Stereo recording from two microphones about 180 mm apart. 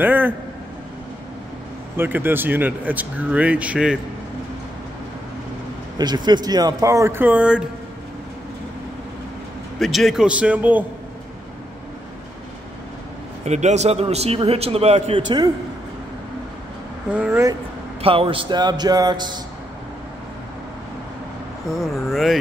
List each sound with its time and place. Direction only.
0.0 s speech: 10° right (ahead or behind)
2.0 s speech: 10° right (ahead or behind)
5.9 s speech: 25° right (ahead or behind); by 7.6 s 5° right (ahead or behind)
9.8 s a man's voice: centre (ahead or behind)
13.5 s a man's voice: 40° right (ahead or behind); by 15.5 s 25° right (ahead or behind)
17.1 s speech: 10° right (ahead or behind)
18.0 s speech: 30° right (ahead or behind)
21.7 s a man's voice: centre (ahead or behind)